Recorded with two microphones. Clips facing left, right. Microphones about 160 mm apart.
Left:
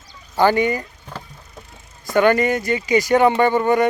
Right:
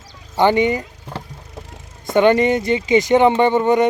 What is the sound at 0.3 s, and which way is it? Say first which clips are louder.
Speech: right 1 dB; 20° right (ahead or behind).